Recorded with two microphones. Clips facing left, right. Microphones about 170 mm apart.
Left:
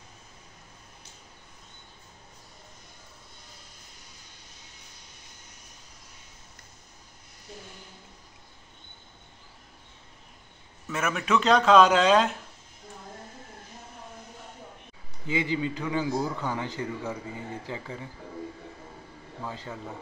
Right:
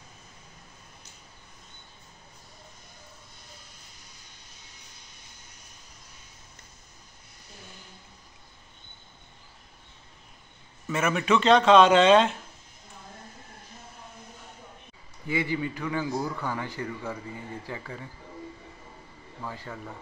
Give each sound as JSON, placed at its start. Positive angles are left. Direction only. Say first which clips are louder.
{"t": 10.9, "sound": "a man's voice", "louder": "right 2 dB", "side_deg": 0}
{"t": 15.2, "sound": "a man's voice", "louder": "left 1 dB", "side_deg": 20}
{"t": 19.4, "sound": "a man's voice", "louder": "left 1 dB", "side_deg": 20}